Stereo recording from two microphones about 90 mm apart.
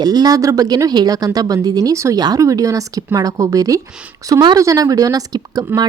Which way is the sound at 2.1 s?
45° right (ahead or behind).